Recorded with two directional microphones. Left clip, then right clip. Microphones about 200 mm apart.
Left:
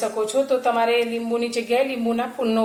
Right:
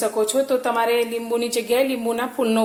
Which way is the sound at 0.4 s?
30° right (ahead or behind).